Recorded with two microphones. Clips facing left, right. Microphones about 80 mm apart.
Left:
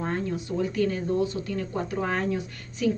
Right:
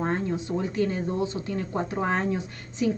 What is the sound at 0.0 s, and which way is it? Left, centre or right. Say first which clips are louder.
Speech: right 2 dB; right.